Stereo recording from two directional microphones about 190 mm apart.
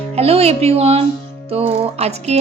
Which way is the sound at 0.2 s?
30° right (ahead or behind).